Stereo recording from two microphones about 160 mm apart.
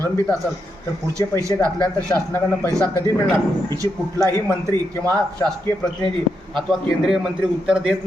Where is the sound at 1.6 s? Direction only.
10° left (ahead or behind).